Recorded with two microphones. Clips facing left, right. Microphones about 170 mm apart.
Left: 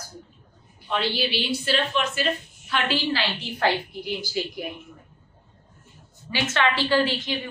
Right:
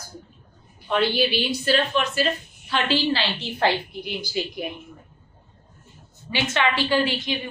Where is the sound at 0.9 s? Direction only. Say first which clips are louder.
Right 4 dB; 50° right (ahead or behind); by 4.7 s 20° right (ahead or behind).